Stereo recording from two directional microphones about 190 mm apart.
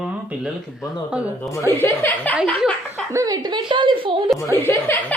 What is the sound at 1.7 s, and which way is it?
Speech, 10° left (ahead or behind).